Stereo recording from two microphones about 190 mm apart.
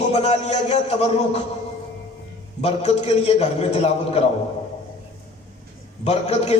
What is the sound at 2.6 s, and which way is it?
A man's voice, 35° left (ahead or behind).